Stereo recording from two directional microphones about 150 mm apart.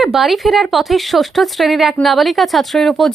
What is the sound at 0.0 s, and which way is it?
Speech, centre (ahead or behind).